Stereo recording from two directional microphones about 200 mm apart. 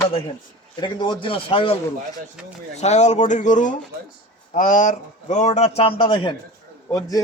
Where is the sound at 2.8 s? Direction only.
35° left (ahead or behind).